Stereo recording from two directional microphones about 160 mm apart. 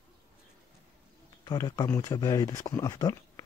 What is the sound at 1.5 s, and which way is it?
Speech, 25° left (ahead or behind).